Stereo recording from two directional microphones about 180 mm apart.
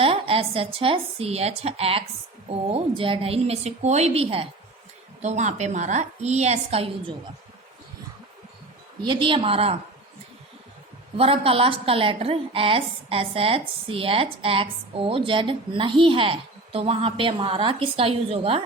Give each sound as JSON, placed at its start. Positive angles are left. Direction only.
{"t": 0.0, "sound": "a woman's voice", "side_deg": -30}
{"t": 9.0, "sound": "a woman's voice", "side_deg": -25}
{"t": 11.2, "sound": "a woman's voice", "side_deg": -30}